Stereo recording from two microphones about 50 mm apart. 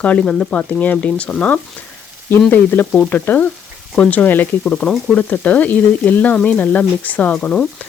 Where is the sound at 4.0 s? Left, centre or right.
Left.